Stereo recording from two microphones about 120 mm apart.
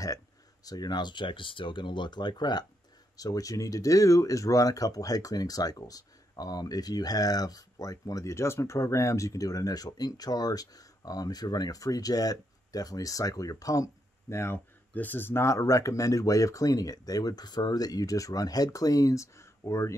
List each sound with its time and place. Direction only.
0.7 s speech: 35° left (ahead or behind)